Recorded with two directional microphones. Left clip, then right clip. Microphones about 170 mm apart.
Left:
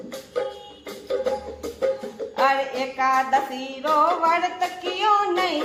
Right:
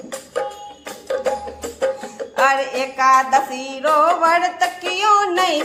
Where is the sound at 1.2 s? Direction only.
25° right (ahead or behind).